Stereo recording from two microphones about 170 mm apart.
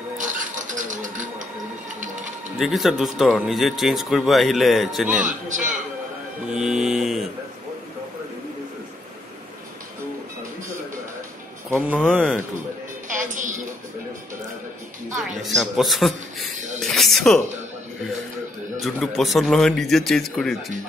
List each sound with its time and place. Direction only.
0.2 s a sound: 50° right (ahead or behind)
2.6 s speech: centre (ahead or behind)
5.1 s speech: 50° right (ahead or behind)
6.4 s speech: 5° right (ahead or behind)
12.0 s speech: centre (ahead or behind)
13.1 s music: 50° right (ahead or behind)
15.4 s speech: centre (ahead or behind)
18.8 s speech: centre (ahead or behind)